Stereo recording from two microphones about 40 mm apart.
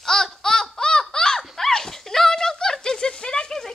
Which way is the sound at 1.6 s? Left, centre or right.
Centre.